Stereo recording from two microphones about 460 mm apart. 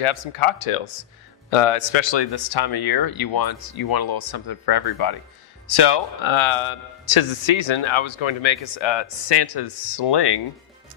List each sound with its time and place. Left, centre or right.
0.0 s a man's voice: left